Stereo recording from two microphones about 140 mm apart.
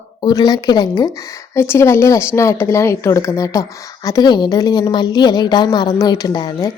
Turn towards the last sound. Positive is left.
turn(degrees=30)  # may be behind; listen again after turning